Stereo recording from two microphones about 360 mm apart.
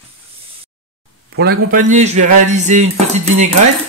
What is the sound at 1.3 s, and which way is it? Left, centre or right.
Dishes, right.